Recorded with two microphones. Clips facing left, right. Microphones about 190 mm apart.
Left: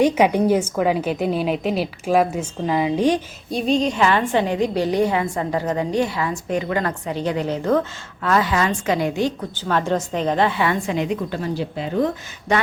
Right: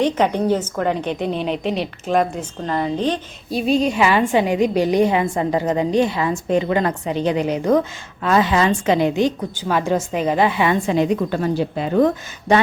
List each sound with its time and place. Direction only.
0.0 s a woman's voice: 10° left (ahead or behind)
3.5 s a woman's voice: 10° right (ahead or behind)
10.9 s a woman's voice: 35° right (ahead or behind)
12.5 s a woman's voice: 30° right (ahead or behind)